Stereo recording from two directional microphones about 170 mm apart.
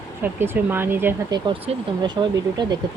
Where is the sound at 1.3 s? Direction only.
25° right (ahead or behind).